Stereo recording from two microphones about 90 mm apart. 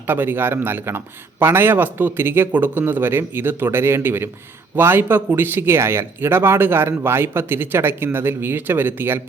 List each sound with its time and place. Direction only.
0.1 s speech: 20° right (ahead or behind)